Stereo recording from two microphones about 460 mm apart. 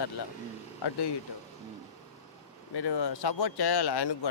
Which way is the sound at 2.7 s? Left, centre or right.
Left.